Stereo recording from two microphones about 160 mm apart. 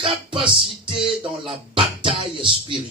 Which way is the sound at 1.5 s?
35° right (ahead or behind).